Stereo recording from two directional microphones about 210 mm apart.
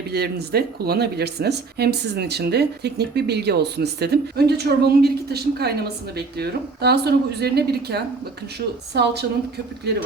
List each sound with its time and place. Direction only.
0.1 s speech: 50° right (ahead or behind)